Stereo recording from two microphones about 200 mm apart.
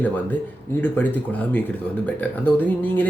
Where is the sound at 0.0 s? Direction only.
10° left (ahead or behind).